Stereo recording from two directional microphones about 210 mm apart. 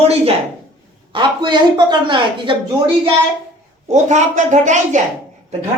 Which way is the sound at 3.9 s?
35° right (ahead or behind).